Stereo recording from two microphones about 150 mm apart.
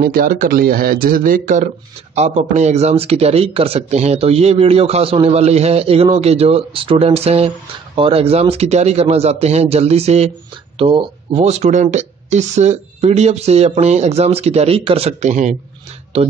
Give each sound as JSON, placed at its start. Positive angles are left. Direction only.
{"t": 0.0, "sound": "speech", "side_deg": -75}
{"t": 2.1, "sound": "speech", "side_deg": -45}